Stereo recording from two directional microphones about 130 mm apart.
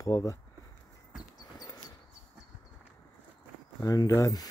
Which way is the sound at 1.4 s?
30° left (ahead or behind).